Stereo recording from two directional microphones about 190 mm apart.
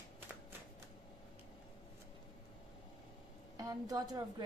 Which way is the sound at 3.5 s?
20° right (ahead or behind).